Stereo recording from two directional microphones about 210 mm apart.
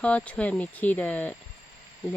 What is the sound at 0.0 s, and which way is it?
Speech, 5° left (ahead or behind).